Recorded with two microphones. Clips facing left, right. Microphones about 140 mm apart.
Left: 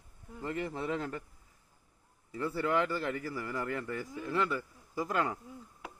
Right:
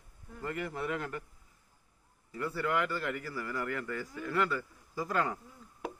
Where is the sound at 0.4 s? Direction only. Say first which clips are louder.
Left 1 dB; 25° left (ahead or behind).